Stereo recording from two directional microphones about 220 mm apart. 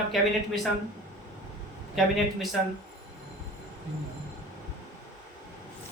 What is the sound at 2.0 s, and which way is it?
Speech, centre (ahead or behind).